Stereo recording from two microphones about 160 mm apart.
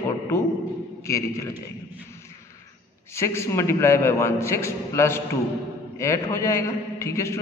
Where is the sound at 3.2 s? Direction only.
15° left (ahead or behind).